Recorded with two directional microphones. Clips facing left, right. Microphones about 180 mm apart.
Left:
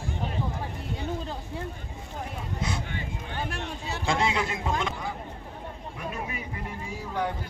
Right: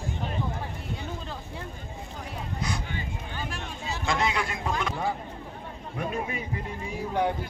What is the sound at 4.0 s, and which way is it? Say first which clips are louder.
Speech: left 1 dB; 30° left (ahead or behind).